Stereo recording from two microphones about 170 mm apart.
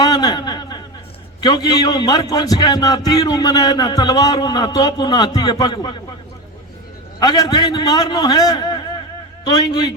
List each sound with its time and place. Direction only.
0.0 s a sound: 25° left (ahead or behind)
1.4 s a man's voice: 25° left (ahead or behind)
7.2 s a man's voice: 25° left (ahead or behind)